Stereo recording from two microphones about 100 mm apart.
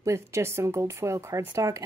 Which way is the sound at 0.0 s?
30° right (ahead or behind).